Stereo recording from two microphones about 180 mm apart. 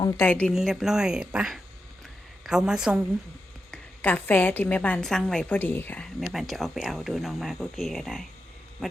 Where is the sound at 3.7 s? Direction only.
10° left (ahead or behind).